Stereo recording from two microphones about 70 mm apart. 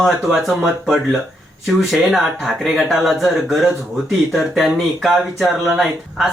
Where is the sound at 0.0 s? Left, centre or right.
Centre.